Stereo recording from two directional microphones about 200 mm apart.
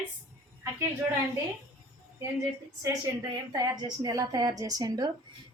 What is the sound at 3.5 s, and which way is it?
A woman's voice, 20° right (ahead or behind).